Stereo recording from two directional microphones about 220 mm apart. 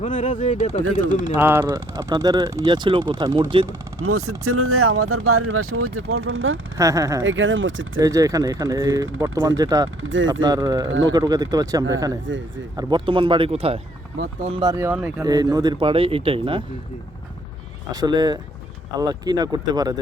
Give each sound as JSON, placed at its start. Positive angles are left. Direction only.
{"t": 0.0, "sound": "speech", "side_deg": 35}
{"t": 1.0, "sound": "speech", "side_deg": -15}
{"t": 4.4, "sound": "speech", "side_deg": -80}
{"t": 6.7, "sound": "speech", "side_deg": -15}
{"t": 7.3, "sound": "speech", "side_deg": -60}
{"t": 8.0, "sound": "speech", "side_deg": -15}
{"t": 10.0, "sound": "speech", "side_deg": -60}
{"t": 10.4, "sound": "speech", "side_deg": -15}
{"t": 10.8, "sound": "speech", "side_deg": -60}
{"t": 11.1, "sound": "speech", "side_deg": -15}
{"t": 12.2, "sound": "speech", "side_deg": -60}
{"t": 12.7, "sound": "speech", "side_deg": -20}
{"t": 17.9, "sound": "speech", "side_deg": -20}